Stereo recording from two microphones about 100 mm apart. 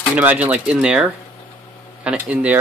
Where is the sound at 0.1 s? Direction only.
15° right (ahead or behind).